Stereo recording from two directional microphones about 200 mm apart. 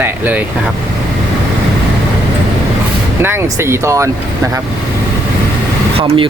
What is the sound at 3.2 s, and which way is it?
Speech, 10° right (ahead or behind).